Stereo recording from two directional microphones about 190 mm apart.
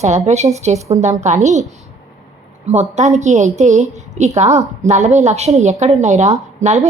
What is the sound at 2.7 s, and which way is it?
A woman's voice, 35° right (ahead or behind).